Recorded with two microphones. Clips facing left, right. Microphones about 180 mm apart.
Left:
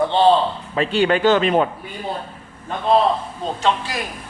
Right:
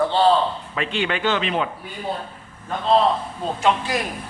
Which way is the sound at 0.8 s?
40° left (ahead or behind).